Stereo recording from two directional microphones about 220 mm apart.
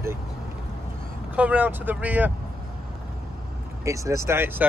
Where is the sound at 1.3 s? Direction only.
5° right (ahead or behind).